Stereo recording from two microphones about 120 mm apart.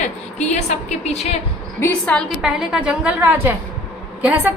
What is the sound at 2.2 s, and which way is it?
A woman's voice, 5° right (ahead or behind).